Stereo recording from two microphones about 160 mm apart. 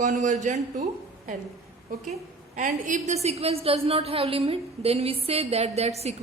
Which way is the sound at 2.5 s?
55° right (ahead or behind).